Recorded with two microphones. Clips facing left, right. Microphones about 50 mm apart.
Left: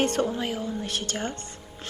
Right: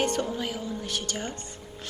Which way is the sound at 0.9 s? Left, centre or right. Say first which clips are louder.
Left 2 dB; left.